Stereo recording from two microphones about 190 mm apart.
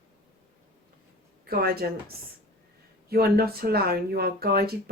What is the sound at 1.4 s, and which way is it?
A woman's voice, 55° right (ahead or behind).